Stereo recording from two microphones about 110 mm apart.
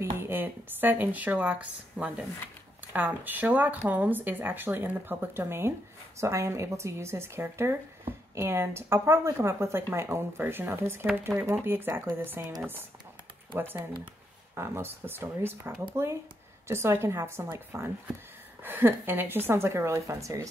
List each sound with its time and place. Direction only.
0.2 s speech: 20° right (ahead or behind)
13.6 s speech: 20° right (ahead or behind)